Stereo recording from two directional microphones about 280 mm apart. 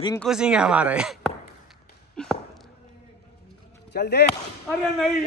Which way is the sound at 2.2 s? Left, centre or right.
Centre.